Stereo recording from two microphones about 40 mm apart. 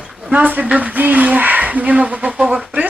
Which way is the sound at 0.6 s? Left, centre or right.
Right.